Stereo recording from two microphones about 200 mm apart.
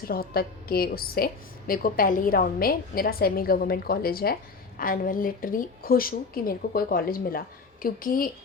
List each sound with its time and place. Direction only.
0.1 s a woman's voice: 50° left (ahead or behind)